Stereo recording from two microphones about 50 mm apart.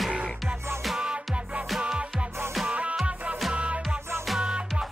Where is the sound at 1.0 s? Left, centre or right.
Right.